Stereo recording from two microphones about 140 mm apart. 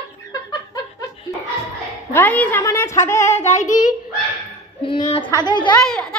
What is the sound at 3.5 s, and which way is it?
Child singing, 60° left (ahead or behind).